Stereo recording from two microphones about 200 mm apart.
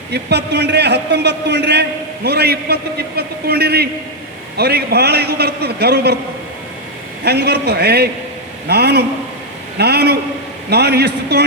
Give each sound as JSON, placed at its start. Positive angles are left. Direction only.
{"t": 0.1, "sound": "a man's voice", "side_deg": -55}
{"t": 7.3, "sound": "a man's voice", "side_deg": -55}